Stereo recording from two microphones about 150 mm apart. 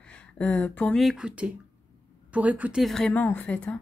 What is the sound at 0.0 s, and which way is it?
Speech, 10° left (ahead or behind).